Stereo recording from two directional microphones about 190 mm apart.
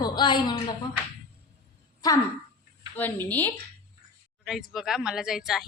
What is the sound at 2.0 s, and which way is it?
Speech, 20° left (ahead or behind).